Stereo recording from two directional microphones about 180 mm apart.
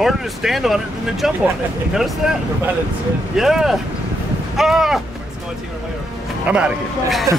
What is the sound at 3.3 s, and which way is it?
Speech, centre (ahead or behind).